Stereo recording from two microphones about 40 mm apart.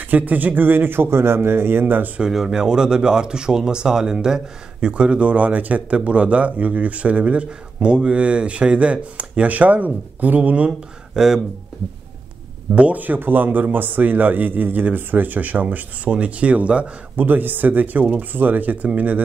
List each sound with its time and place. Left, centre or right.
0.0 s speech: right
2.3 s speech: centre; by 10.7 s right
11.1 s speech: centre
12.9 s a man's voice: right
17.2 s a man's voice: right